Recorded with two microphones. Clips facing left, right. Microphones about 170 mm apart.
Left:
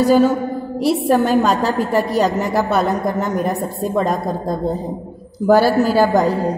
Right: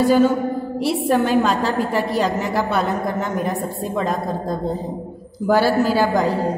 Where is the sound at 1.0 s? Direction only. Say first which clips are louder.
Left 1 dB; 40° left (ahead or behind).